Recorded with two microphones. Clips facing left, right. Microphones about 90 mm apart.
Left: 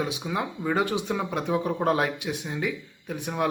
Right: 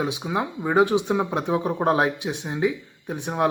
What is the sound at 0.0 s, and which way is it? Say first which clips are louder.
Speech: right 3 dB; 20° right (ahead or behind).